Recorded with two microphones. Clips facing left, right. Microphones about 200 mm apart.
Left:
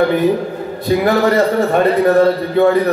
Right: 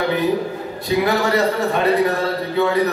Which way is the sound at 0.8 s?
50° left (ahead or behind).